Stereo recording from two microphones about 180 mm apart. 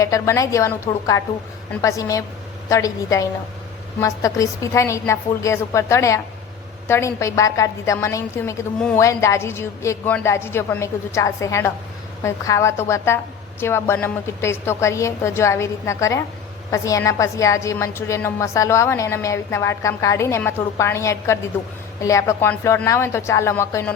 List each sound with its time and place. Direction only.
0.0 s a woman's voice: 15° left (ahead or behind)